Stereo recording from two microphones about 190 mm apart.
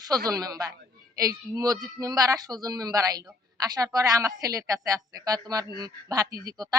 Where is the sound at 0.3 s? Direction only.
20° right (ahead or behind).